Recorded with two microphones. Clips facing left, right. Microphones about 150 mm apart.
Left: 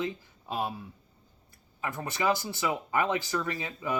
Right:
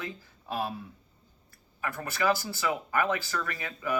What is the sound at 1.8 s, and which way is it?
Speech, 20° left (ahead or behind).